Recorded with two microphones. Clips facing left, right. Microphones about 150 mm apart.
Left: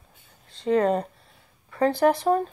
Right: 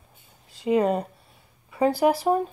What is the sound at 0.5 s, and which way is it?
A child's voice, 10° right (ahead or behind).